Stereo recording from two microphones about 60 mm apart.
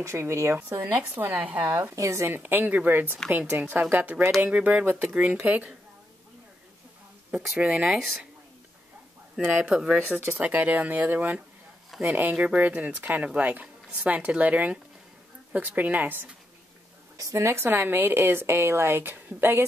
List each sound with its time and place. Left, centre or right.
0.0 s a woman's voice: right
1.4 s speech: right
2.0 s speech: right
2.2 s a woman's voice: right
7.5 s speech: right
7.8 s speech: centre
9.7 s speech: centre
9.9 s a woman's voice: right
10.4 s speech: right
17.2 s a woman's voice: right